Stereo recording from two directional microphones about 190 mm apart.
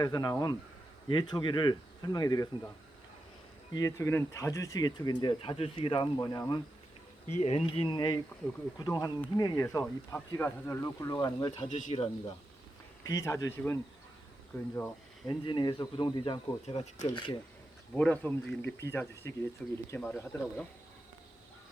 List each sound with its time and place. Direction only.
0.0 s speech: 20° left (ahead or behind)
3.8 s speech: 15° left (ahead or behind)
7.3 s speech: 35° left (ahead or behind)
11.7 s speech: 35° left (ahead or behind)
13.1 s speech: 15° left (ahead or behind); by 17.1 s 35° left (ahead or behind)
17.1 s speech: 25° left (ahead or behind)
17.9 s speech: 10° left (ahead or behind)